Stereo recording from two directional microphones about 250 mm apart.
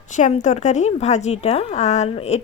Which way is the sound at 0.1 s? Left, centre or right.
Left.